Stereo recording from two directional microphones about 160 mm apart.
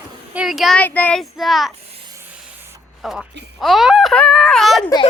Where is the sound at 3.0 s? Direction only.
Centre (ahead or behind).